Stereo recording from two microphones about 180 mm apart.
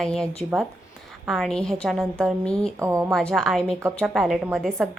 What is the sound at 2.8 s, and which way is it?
Speech, 15° right (ahead or behind).